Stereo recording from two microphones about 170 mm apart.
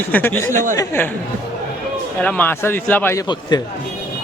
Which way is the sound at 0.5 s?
50° right (ahead or behind).